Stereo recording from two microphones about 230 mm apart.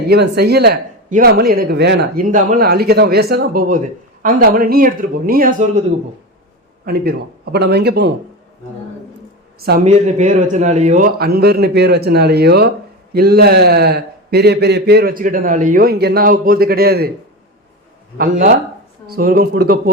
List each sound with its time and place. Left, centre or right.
0.1 s speech: right
6.8 s a man's voice: right
9.6 s speech: right
9.8 s a man's voice: right
18.2 s speech: right